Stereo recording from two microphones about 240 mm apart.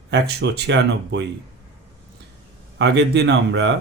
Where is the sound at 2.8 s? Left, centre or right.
Right.